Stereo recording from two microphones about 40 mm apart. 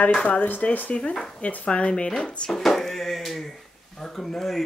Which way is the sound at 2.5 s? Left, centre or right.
Centre.